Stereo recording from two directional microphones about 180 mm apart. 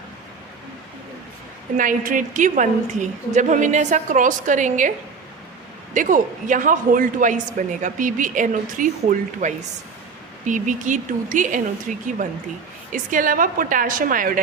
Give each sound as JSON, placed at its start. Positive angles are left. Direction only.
{"t": 1.7, "sound": "speech", "side_deg": -45}
{"t": 5.9, "sound": "speech", "side_deg": -45}
{"t": 12.9, "sound": "speech", "side_deg": -50}